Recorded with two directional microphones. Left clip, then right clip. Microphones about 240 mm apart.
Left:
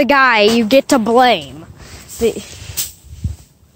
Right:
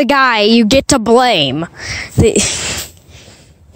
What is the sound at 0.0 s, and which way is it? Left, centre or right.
Speech, right.